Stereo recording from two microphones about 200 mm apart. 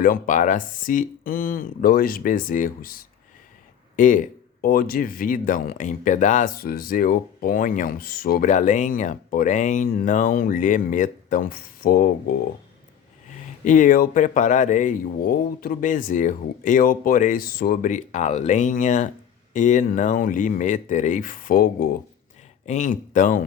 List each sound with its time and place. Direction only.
0.0 s speech: 45° left (ahead or behind)
13.7 s speech: 40° left (ahead or behind)